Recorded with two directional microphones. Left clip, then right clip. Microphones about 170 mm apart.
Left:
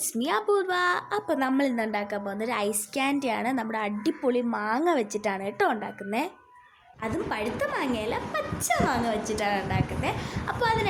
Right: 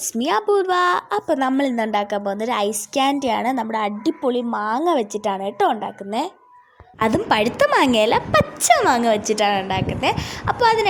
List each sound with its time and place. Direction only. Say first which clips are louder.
0.0 s a woman's voice: right 7 dB; 30° right (ahead or behind)
7.0 s speech: right 12 dB; 45° right (ahead or behind)